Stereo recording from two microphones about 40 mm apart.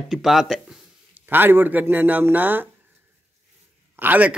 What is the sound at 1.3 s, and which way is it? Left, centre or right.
A man's voice, right.